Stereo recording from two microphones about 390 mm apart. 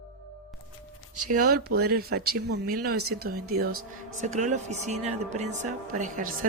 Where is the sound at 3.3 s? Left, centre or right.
Right.